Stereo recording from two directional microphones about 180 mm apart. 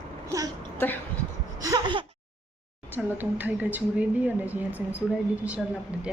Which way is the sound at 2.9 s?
10° right (ahead or behind).